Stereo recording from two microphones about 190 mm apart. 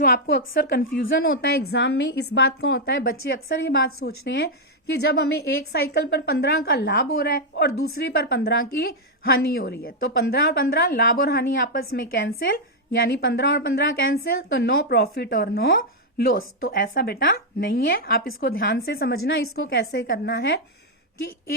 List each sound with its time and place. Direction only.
0.0 s a woman's voice: 60° left (ahead or behind)
0.9 s a woman's voice: 90° left
8.1 s a woman's voice: 55° left (ahead or behind)
19.5 s a woman's voice: 90° left
19.8 s a woman's voice: 55° left (ahead or behind)